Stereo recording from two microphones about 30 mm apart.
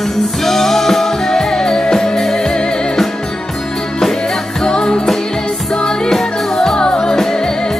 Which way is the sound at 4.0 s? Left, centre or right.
Centre.